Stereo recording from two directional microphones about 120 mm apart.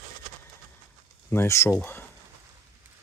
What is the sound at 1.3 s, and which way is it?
Speech, 20° left (ahead or behind).